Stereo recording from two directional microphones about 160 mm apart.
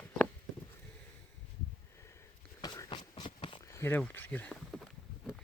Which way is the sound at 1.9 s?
15° left (ahead or behind).